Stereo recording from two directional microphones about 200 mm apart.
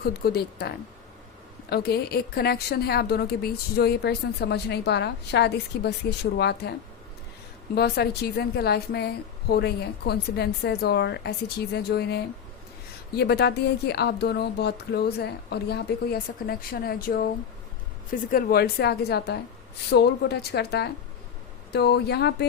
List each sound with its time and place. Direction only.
0.0 s a woman's voice: 50° left (ahead or behind)
7.8 s a woman's voice: 50° left (ahead or behind)